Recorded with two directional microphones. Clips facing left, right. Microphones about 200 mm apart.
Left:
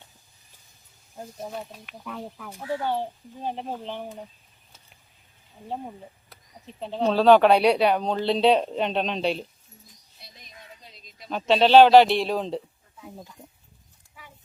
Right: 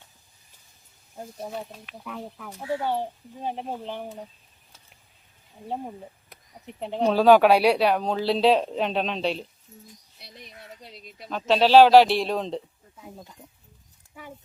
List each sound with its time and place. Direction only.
1.1 s speech: 5° right (ahead or behind)
2.5 s speech: 20° right (ahead or behind)
2.8 s speech: 10° right (ahead or behind)
6.7 s speech: 15° right (ahead or behind); by 9.4 s centre (ahead or behind)
10.2 s bird: 70° right (ahead or behind)
10.8 s a sound: 65° right (ahead or behind)
11.3 s speech: centre (ahead or behind)
13.4 s a sound: centre (ahead or behind)